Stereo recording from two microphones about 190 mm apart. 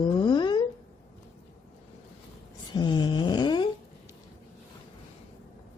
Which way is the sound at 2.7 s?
25° left (ahead or behind).